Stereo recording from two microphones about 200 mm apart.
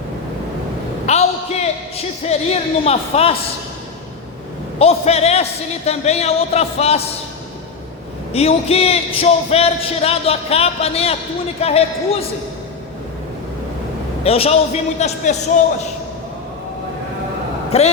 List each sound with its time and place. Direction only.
1.0 s a man's voice: 30° left (ahead or behind)
4.8 s speech: 30° left (ahead or behind)
8.3 s speech: 30° left (ahead or behind)
14.3 s speech: 30° left (ahead or behind)
17.7 s a man's voice: 30° left (ahead or behind)